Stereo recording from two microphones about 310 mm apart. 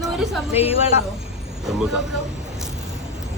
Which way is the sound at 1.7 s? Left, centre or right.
Centre.